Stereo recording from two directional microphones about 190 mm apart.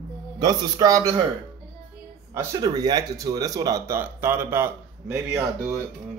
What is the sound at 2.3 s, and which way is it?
Speech, 20° right (ahead or behind).